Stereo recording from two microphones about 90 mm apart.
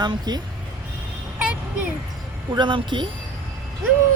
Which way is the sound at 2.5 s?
65° right (ahead or behind).